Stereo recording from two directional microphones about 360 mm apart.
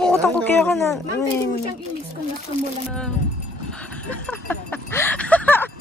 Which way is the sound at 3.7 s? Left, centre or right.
Centre.